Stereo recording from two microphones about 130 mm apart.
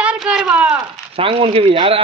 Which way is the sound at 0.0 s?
10° right (ahead or behind).